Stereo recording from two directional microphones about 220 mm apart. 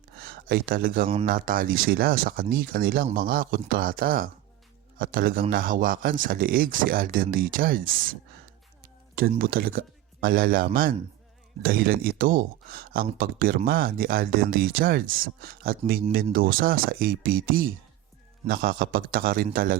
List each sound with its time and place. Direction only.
0.2 s speech: 40° right (ahead or behind)
9.1 s speech: 40° right (ahead or behind)